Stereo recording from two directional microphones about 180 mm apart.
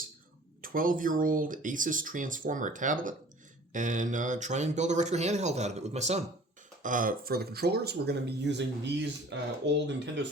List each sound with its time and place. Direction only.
0.6 s speech: 50° right (ahead or behind)
6.8 s speech: 50° right (ahead or behind); by 10.2 s 75° right (ahead or behind)